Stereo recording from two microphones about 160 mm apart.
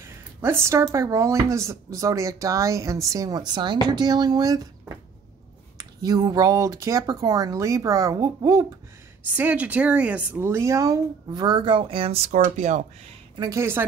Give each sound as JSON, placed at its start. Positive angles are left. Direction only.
{"t": 0.0, "sound": "speech", "side_deg": -15}
{"t": 9.2, "sound": "speech", "side_deg": -10}
{"t": 13.4, "sound": "speech", "side_deg": -15}